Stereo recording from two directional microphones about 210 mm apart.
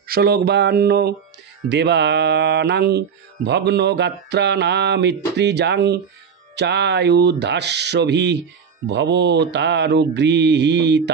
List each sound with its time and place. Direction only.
0.0 s speech: 45° right (ahead or behind)
6.5 s mantra: 55° right (ahead or behind)